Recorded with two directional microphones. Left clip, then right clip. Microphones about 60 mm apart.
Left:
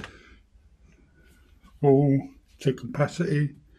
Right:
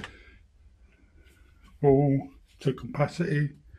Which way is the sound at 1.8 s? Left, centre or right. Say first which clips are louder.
Left 2 dB; left.